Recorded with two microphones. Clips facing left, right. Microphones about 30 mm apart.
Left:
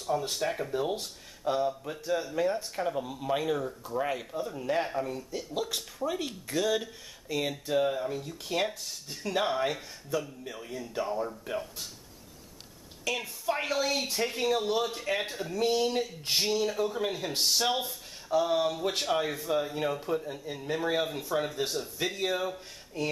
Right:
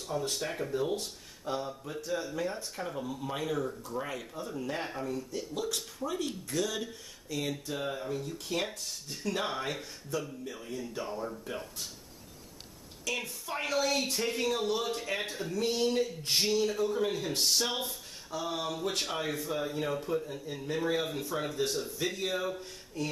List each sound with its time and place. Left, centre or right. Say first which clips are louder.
0.3 s speech: left 3 dB; centre
13.1 s speech: left 4 dB; centre